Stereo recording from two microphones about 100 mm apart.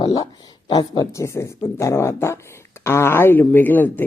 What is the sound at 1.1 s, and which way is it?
Speech, 30° left (ahead or behind).